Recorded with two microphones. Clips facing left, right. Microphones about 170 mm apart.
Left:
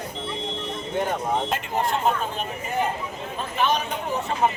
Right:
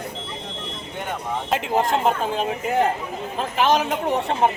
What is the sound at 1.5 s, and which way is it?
Speech, 90° right.